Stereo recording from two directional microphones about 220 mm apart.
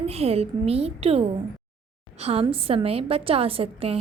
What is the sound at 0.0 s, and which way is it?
A woman's voice, 25° right (ahead or behind).